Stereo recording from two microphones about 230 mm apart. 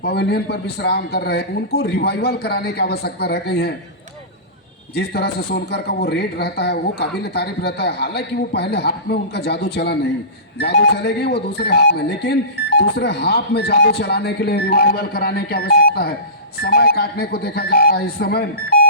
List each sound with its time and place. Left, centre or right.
0.0 s speech: left
4.9 s speech: left